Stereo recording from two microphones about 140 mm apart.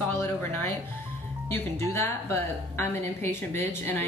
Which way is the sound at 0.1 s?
15° left (ahead or behind).